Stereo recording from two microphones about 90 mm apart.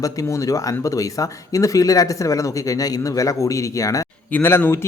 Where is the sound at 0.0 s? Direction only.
35° left (ahead or behind).